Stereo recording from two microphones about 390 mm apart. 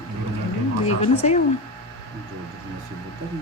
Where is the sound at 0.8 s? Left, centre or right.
Centre.